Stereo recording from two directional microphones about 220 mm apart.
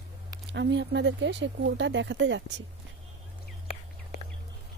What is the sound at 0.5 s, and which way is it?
Speech, 55° right (ahead or behind).